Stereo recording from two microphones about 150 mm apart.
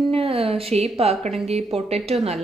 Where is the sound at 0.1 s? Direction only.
40° right (ahead or behind).